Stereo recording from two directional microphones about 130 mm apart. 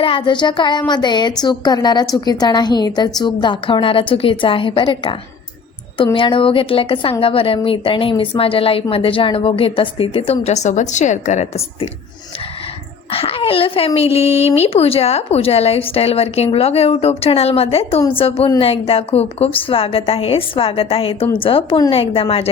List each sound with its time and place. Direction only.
0.0 s a woman's voice: 40° left (ahead or behind)
6.1 s a woman's voice: 40° left (ahead or behind)
13.1 s a woman's voice: 45° left (ahead or behind)